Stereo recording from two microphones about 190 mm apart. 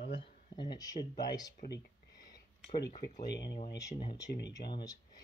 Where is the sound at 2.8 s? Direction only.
55° left (ahead or behind).